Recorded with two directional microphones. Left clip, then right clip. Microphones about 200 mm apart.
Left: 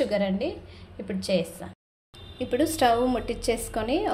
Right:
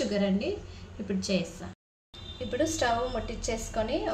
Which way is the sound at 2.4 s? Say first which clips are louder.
Left 5 dB; 35° left (ahead or behind).